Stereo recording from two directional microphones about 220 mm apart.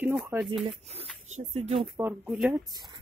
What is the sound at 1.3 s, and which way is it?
Speech, 30° right (ahead or behind).